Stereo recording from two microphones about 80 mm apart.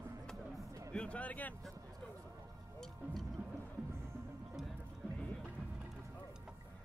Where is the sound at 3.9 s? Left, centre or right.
Right.